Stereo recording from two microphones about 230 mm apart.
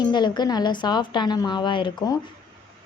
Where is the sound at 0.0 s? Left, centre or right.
Centre.